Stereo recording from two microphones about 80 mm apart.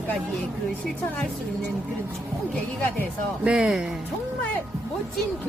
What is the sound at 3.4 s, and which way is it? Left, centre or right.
Speech, centre.